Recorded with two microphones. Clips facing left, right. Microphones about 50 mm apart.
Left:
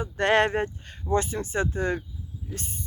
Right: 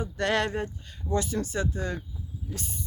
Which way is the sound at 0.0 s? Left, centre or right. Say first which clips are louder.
Left 5 dB; left.